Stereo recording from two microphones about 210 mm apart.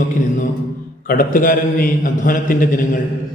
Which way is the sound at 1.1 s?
40° left (ahead or behind).